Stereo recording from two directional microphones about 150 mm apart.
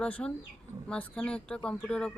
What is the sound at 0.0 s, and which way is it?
Speech, 10° left (ahead or behind).